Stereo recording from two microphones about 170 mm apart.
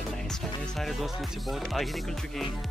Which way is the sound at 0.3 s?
Centre (ahead or behind).